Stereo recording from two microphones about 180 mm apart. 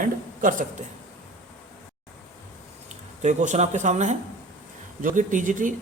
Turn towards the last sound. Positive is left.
turn(degrees=-45)  # may be behind; listen again after turning